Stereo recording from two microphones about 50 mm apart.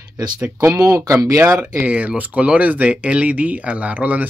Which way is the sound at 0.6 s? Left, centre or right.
Right.